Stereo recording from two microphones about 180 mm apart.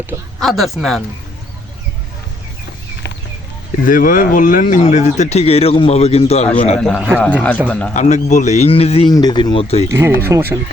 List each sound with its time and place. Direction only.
0.3 s speech: centre (ahead or behind)
3.8 s speech: 50° left (ahead or behind)
6.7 s a man's voice: 5° left (ahead or behind)
7.9 s speech: 40° left (ahead or behind)
10.2 s speech: 15° right (ahead or behind)